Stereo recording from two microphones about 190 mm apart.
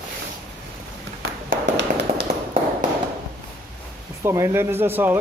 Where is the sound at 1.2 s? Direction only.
75° right (ahead or behind).